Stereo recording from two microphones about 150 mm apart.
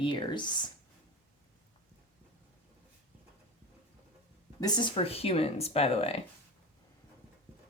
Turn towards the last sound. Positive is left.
turn(degrees=40)  # may be behind; listen again after turning